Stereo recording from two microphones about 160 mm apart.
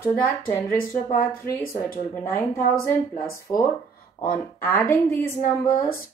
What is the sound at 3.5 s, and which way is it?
Speech, 20° left (ahead or behind).